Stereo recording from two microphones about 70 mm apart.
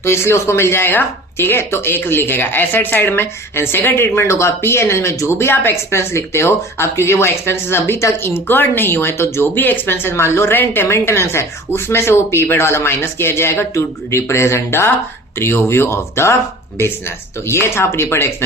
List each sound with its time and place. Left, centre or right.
0.0 s speech: left